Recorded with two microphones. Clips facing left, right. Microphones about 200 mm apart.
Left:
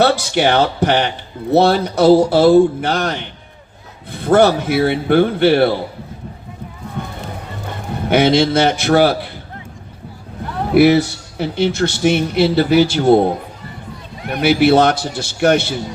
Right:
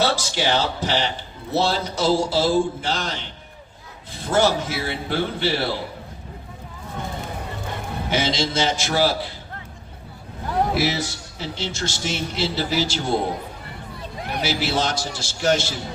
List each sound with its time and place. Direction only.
0.3 s a man's voice: 60° left (ahead or behind)
8.1 s a man's voice: 60° left (ahead or behind)
10.8 s a man's voice: 60° left (ahead or behind)
14.3 s a man's voice: 60° left (ahead or behind)